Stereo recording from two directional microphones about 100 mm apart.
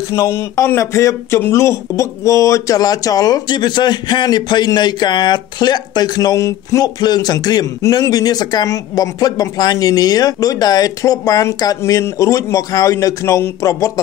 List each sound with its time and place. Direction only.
0.1 s speech: 30° left (ahead or behind)